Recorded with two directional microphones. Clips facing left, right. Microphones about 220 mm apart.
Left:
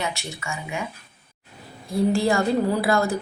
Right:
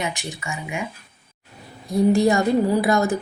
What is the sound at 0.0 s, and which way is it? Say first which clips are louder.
Speech: right 1 dB; 15° right (ahead or behind).